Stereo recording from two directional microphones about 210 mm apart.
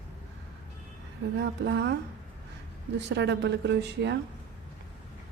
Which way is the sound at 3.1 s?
55° right (ahead or behind).